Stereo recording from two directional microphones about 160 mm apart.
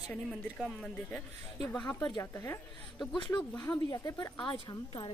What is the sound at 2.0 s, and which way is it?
A woman's voice, 25° left (ahead or behind).